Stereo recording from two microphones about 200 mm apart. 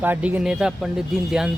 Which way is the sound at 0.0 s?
10° right (ahead or behind).